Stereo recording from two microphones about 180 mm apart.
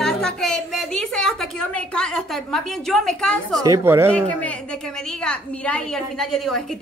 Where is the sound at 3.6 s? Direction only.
15° right (ahead or behind).